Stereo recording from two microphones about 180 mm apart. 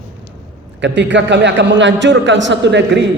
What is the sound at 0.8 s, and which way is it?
A man's voice, 85° right.